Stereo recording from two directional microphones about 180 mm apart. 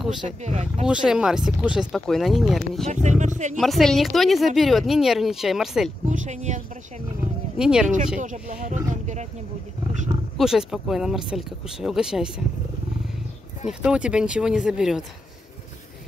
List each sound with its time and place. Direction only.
0.4 s speech: 40° right (ahead or behind)
0.8 s speech: 5° right (ahead or behind)
2.9 s speech: 40° right (ahead or behind)
3.5 s speech: centre (ahead or behind)
6.0 s speech: 40° right (ahead or behind)
7.5 s speech: 5° right (ahead or behind)
8.2 s speech: 45° right (ahead or behind)
8.9 s wild animals: 40° right (ahead or behind)
10.3 s speech: 5° right (ahead or behind)
13.7 s speech: 5° right (ahead or behind)